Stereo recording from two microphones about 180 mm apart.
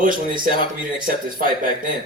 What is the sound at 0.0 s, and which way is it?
A woman's voice, 50° right (ahead or behind).